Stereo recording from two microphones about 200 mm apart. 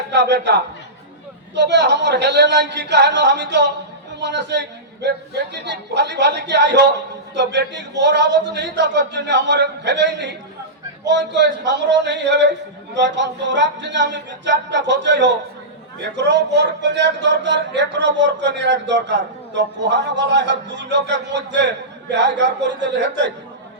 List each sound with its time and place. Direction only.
0.1 s speech: 60° right (ahead or behind)